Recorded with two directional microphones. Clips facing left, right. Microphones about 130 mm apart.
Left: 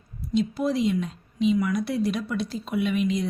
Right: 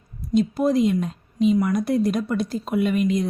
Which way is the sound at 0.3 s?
45° right (ahead or behind).